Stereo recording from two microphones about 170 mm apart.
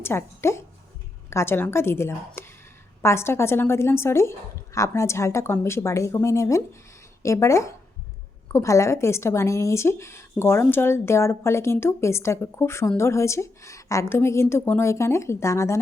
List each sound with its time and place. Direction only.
0.0 s a woman's voice: 15° left (ahead or behind)